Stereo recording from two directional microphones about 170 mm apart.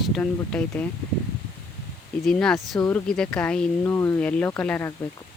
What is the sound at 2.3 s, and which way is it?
Speech, 5° left (ahead or behind).